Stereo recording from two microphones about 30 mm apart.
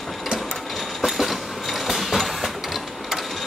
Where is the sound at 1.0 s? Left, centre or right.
Centre.